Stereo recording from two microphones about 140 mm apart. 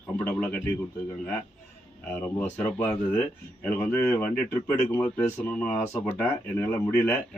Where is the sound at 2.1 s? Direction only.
10° left (ahead or behind).